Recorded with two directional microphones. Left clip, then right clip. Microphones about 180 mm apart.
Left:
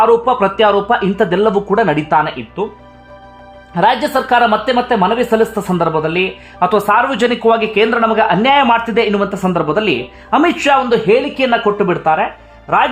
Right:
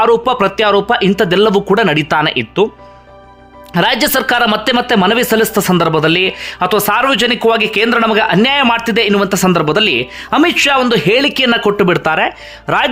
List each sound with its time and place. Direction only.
0.0 s speech: 20° right (ahead or behind)
3.8 s speech: 20° right (ahead or behind)